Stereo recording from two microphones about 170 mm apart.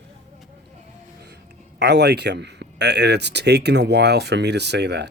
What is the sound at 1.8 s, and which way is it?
Speech, 80° right.